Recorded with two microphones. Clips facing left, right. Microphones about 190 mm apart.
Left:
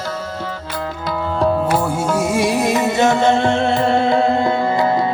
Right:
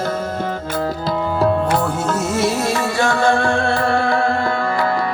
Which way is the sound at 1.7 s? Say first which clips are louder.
Left 1 dB; 10° left (ahead or behind).